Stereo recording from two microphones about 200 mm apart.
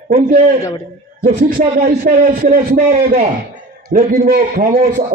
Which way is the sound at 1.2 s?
45° right (ahead or behind).